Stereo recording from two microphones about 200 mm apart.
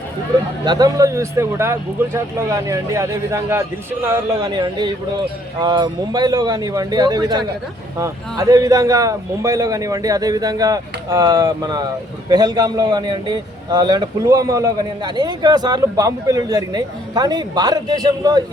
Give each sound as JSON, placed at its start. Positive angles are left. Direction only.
{"t": 0.6, "sound": "a man's voice", "side_deg": -20}